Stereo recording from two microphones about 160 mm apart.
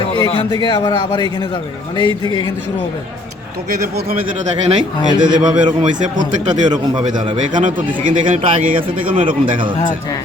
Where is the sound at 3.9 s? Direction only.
70° right (ahead or behind).